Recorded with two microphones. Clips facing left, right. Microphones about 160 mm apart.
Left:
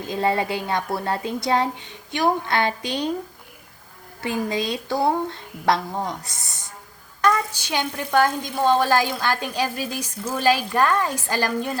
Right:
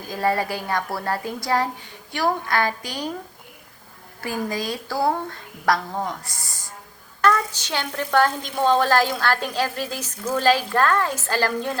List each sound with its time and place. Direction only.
0.0 s a woman's voice: 25° left (ahead or behind)
4.2 s a woman's voice: 20° left (ahead or behind)